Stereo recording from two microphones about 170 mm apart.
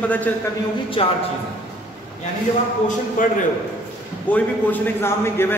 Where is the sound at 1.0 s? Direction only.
35° left (ahead or behind).